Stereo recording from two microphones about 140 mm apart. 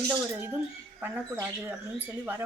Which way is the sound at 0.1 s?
15° right (ahead or behind).